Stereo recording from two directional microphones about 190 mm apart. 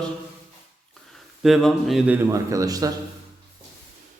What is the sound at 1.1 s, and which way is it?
A man's voice, centre (ahead or behind).